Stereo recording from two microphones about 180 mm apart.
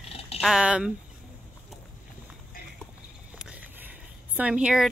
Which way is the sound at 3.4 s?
5° right (ahead or behind).